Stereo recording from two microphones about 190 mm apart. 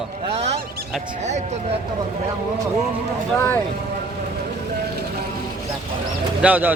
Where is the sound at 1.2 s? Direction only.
35° right (ahead or behind).